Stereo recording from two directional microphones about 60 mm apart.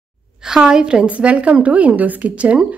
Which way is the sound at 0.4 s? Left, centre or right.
Centre.